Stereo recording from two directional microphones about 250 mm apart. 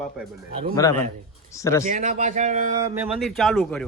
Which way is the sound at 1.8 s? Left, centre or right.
Right.